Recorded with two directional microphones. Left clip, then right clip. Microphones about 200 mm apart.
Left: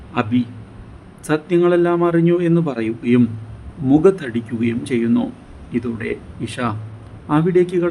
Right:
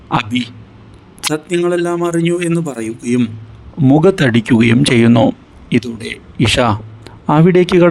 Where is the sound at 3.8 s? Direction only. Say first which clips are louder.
Right 4 dB; 45° right (ahead or behind).